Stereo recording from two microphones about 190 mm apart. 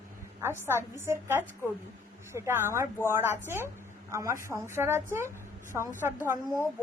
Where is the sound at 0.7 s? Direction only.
15° right (ahead or behind).